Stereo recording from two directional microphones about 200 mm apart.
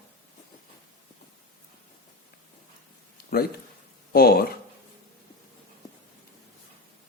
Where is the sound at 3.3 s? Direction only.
50° left (ahead or behind).